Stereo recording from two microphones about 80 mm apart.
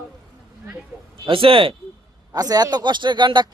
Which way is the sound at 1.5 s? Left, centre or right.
Right.